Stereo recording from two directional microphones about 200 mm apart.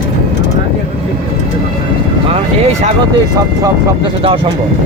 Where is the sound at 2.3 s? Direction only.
30° right (ahead or behind).